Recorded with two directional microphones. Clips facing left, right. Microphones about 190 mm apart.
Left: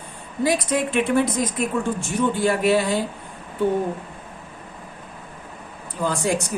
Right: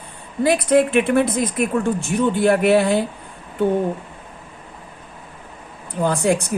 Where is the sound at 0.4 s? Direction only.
60° right (ahead or behind).